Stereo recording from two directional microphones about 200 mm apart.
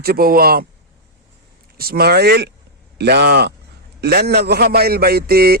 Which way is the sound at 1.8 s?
50° right (ahead or behind).